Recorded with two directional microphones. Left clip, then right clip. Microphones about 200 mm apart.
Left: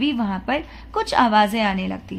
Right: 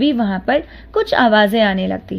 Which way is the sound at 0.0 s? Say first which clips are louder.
Right 6 dB; 20° right (ahead or behind).